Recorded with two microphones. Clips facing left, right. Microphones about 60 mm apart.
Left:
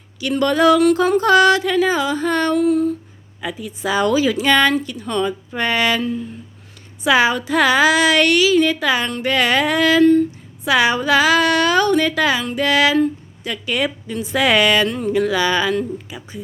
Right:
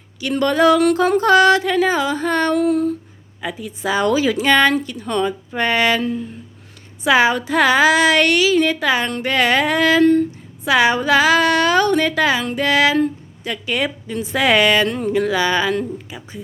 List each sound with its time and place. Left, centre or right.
0.2 s a woman's voice: right
2.6 s a sound: right
3.4 s a woman's voice: right
7.0 s a woman's voice: right
10.0 s a sound: right
10.7 s a woman's voice: right